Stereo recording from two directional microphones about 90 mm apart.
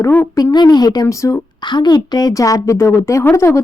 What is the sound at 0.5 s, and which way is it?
Speech, 50° left (ahead or behind).